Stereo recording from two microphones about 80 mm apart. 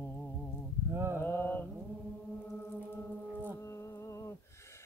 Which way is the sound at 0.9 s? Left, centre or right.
Right.